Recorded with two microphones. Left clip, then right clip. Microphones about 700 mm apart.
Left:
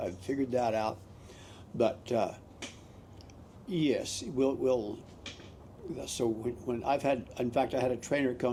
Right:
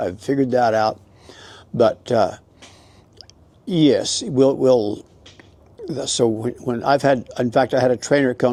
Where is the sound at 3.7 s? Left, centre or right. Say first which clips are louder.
Right 14 dB; right.